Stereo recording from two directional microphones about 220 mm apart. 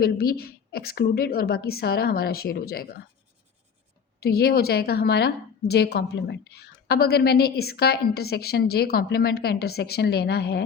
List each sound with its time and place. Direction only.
0.0 s a woman's voice: 45° left (ahead or behind)
4.2 s a woman's voice: 45° left (ahead or behind)